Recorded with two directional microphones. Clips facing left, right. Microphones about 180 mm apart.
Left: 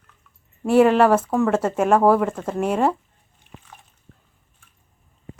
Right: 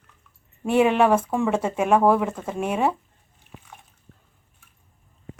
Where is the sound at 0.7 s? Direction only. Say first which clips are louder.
Left 3 dB; 10° right (ahead or behind).